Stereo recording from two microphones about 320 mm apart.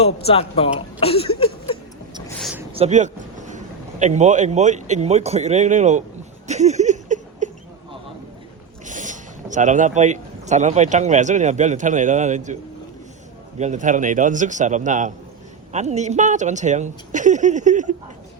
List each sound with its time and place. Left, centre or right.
0.0 s speech: centre
2.2 s a sound: centre
2.7 s vehicle: right
4.0 s a woman's voice: right
6.5 s a sound: right
8.9 s speech: right
13.6 s a woman's voice: right